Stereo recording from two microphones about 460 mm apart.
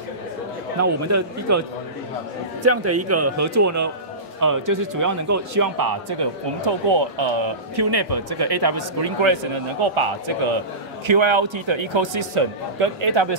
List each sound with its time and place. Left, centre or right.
0.7 s speech: right
2.6 s a man's voice: right
11.1 s a man's voice: right